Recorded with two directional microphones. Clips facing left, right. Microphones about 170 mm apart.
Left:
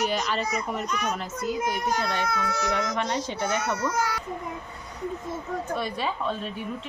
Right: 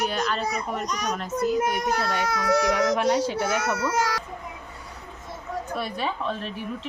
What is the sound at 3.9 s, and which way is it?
Speech, 85° right.